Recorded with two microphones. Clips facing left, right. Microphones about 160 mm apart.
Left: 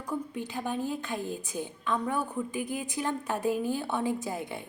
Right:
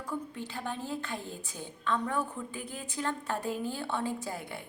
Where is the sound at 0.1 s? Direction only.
15° left (ahead or behind).